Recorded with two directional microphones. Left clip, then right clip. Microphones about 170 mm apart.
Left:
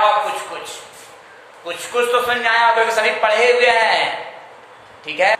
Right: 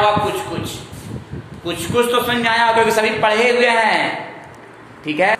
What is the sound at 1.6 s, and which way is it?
A man's voice, 25° right (ahead or behind).